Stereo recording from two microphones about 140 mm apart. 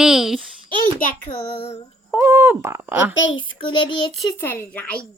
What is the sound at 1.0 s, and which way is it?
Speech, 85° left.